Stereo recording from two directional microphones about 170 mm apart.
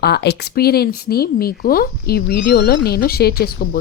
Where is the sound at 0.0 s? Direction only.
75° left (ahead or behind).